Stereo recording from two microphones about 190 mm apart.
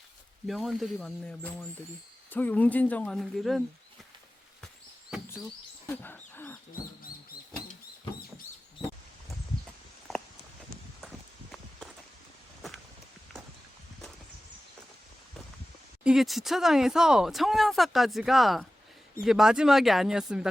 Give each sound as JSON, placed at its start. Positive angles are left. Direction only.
{"t": 0.4, "sound": "speech", "side_deg": 0}
{"t": 5.9, "sound": "speech", "side_deg": 10}
{"t": 16.0, "sound": "speech", "side_deg": 0}